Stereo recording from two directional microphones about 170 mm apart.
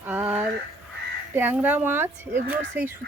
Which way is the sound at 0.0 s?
10° right (ahead or behind).